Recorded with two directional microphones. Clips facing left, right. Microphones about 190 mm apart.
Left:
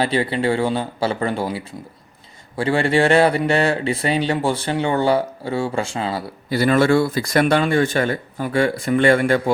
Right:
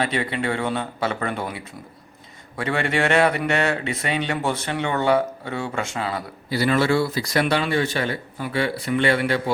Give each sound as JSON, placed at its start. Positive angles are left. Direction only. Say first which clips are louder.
{"t": 0.0, "sound": "speech", "louder": "left 5 dB", "side_deg": 30}
{"t": 6.5, "sound": "speech", "louder": "left 4 dB", "side_deg": 50}